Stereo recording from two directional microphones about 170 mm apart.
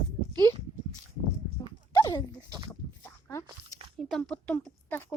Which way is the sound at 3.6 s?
35° right (ahead or behind).